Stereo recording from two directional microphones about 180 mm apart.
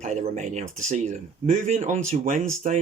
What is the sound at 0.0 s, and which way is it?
Speech, 40° right (ahead or behind).